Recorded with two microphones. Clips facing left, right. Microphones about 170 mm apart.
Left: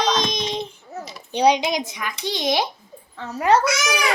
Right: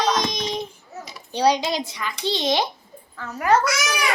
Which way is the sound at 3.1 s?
25° left (ahead or behind).